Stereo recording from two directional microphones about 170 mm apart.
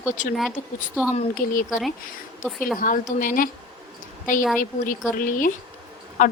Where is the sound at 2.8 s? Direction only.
50° left (ahead or behind).